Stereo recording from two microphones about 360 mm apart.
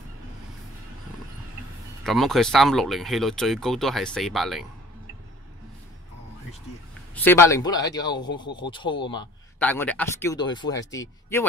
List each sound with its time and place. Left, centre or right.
2.0 s speech: centre
7.2 s speech: centre